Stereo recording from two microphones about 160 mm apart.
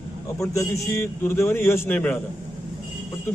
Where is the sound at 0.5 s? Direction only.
15° left (ahead or behind).